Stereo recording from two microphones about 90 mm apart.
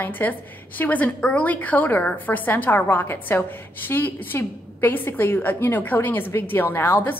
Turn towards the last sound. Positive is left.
turn(degrees=25)  # may be behind; listen again after turning